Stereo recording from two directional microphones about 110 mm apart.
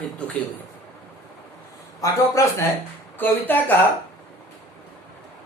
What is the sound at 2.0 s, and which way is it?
Speech, 30° left (ahead or behind).